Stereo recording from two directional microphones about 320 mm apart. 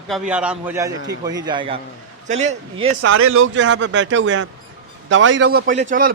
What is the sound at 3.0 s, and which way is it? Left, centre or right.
A man's voice, right.